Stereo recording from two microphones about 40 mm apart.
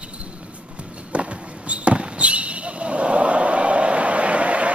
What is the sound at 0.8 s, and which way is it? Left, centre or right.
Basketball bounce, right.